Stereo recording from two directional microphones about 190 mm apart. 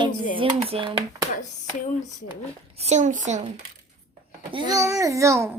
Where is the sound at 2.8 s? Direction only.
40° right (ahead or behind).